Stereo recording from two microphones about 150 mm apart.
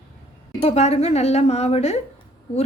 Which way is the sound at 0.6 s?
45° left (ahead or behind).